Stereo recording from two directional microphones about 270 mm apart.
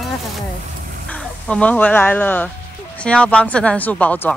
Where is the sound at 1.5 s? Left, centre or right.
Centre.